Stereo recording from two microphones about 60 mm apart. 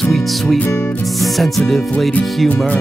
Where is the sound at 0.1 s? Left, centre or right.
Centre.